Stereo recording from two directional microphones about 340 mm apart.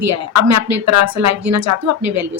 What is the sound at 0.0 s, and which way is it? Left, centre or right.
Speech, right.